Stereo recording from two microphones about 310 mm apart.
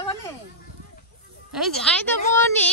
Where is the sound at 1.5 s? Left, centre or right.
Centre.